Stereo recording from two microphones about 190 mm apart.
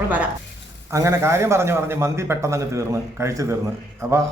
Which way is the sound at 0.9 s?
15° right (ahead or behind).